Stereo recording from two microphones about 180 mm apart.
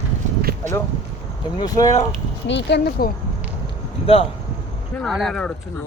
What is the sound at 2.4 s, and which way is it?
Speech, 75° left (ahead or behind).